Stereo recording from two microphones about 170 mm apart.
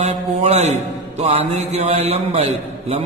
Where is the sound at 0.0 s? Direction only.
40° right (ahead or behind).